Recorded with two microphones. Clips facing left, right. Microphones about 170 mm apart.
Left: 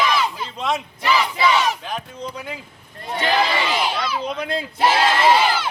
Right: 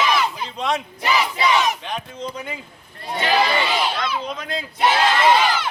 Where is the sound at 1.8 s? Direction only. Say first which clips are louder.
Even; 5° left (ahead or behind).